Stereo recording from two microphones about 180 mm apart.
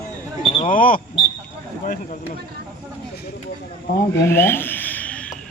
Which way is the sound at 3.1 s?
60° left (ahead or behind).